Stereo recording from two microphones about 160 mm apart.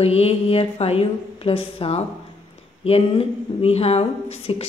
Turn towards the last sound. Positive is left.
turn(degrees=40)  # may be behind; listen again after turning